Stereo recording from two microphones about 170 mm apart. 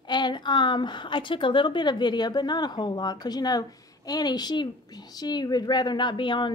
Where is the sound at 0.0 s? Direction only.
25° left (ahead or behind).